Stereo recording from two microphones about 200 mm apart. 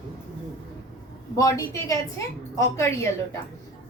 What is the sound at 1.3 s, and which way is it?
A woman's voice, 15° left (ahead or behind).